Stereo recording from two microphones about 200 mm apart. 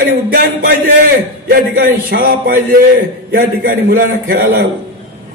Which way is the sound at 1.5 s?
50° right (ahead or behind).